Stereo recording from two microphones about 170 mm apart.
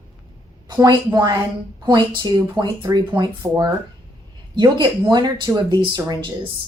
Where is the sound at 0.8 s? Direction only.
25° right (ahead or behind).